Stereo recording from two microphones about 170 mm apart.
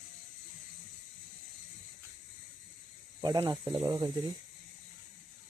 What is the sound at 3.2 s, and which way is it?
Speech, 25° right (ahead or behind).